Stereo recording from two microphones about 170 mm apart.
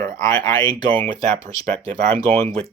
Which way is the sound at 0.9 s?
10° left (ahead or behind).